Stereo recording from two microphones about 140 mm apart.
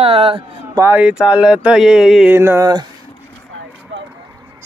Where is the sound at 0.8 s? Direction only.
15° right (ahead or behind).